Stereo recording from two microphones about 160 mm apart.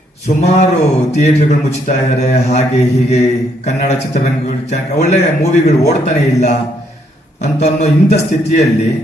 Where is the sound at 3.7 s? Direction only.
45° left (ahead or behind).